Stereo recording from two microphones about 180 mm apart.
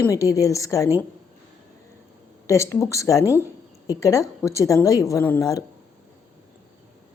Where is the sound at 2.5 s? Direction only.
15° left (ahead or behind).